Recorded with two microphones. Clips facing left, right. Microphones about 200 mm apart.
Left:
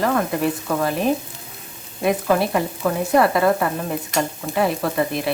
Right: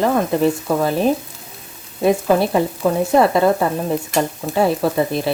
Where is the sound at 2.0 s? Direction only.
30° right (ahead or behind).